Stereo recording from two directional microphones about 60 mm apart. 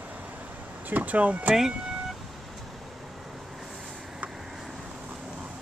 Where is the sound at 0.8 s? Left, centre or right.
Right.